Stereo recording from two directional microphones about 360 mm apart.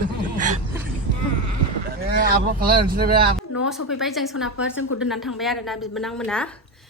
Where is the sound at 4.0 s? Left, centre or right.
Centre.